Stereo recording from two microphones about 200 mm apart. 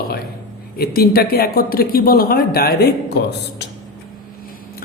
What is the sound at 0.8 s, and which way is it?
Speech, 50° left (ahead or behind).